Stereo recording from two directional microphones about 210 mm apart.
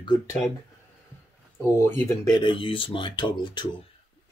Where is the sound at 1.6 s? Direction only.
10° left (ahead or behind).